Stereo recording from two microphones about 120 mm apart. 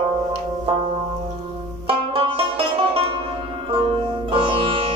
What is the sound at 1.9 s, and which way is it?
Banjo, 50° right (ahead or behind).